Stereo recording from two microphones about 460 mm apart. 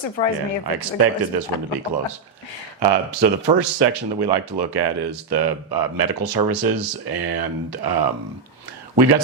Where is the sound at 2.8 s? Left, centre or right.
Right.